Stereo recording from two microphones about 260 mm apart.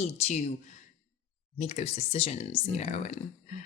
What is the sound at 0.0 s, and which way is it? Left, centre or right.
Speech, left.